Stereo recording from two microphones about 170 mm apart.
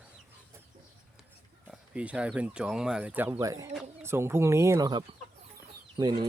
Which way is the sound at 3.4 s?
20° right (ahead or behind).